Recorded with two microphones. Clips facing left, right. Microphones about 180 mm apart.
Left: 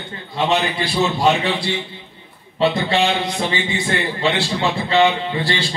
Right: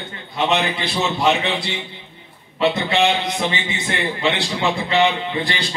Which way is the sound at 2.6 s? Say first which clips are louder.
Even; 20° right (ahead or behind).